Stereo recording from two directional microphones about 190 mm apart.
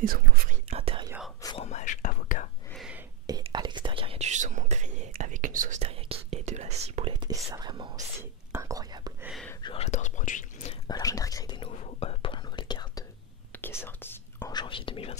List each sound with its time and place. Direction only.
0.0 s speech: 50° right (ahead or behind)
0.7 s whispering: 30° right (ahead or behind)
1.4 s whispering: 25° left (ahead or behind)
1.7 s whispering: 40° left (ahead or behind)
2.7 s a sound: centre (ahead or behind)
3.4 s whispering: 25° right (ahead or behind); by 5.8 s 45° right (ahead or behind)
5.8 s whispering: 30° right (ahead or behind)
7.4 s whispering: 20° right (ahead or behind)
9.2 s whispering: centre (ahead or behind)
9.5 s whispering: 25° left (ahead or behind)
10.9 s whispering: 20° left (ahead or behind)
13.6 s whispering: 10° left (ahead or behind)
14.5 s whispering: 25° left (ahead or behind)